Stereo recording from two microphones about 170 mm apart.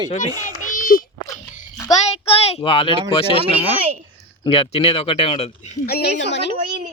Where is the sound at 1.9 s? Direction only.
35° left (ahead or behind).